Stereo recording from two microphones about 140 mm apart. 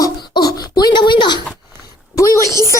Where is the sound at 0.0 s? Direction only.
30° left (ahead or behind).